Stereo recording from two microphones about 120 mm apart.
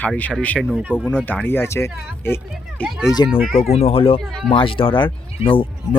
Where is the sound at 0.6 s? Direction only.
10° right (ahead or behind).